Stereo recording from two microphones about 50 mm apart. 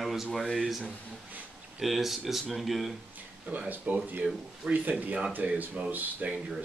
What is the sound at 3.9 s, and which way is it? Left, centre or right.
Speech, right.